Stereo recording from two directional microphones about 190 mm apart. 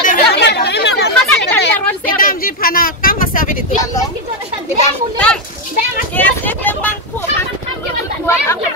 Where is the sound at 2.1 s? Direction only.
50° left (ahead or behind).